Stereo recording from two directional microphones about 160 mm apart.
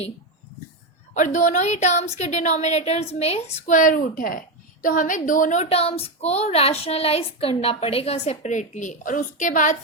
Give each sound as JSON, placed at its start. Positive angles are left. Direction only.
{"t": 1.1, "sound": "speech", "side_deg": 50}